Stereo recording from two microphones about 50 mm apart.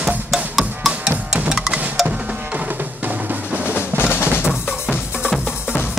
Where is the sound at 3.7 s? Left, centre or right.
Left.